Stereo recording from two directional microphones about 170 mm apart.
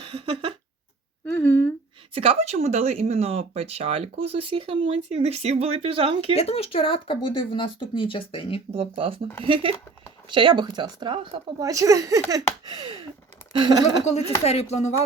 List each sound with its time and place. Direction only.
0.1 s a sound: 35° right (ahead or behind)
1.3 s a sound: 15° left (ahead or behind)
2.1 s speech: 35° right (ahead or behind)
6.3 s speech: 35° left (ahead or behind)
8.7 s speech: 35° right (ahead or behind)
14.0 s speech: 40° left (ahead or behind)